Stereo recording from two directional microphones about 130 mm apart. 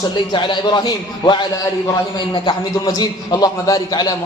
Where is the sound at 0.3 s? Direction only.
35° left (ahead or behind).